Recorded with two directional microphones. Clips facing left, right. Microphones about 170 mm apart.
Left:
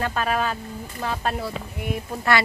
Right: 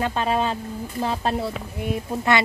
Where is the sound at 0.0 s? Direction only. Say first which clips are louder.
Right 2 dB; 25° right (ahead or behind).